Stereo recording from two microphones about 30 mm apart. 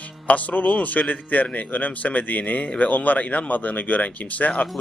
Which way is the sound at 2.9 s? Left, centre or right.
Left.